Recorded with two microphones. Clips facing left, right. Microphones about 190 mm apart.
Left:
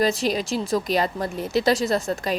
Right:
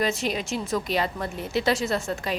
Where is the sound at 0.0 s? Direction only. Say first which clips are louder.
Left 4 dB; 35° left (ahead or behind).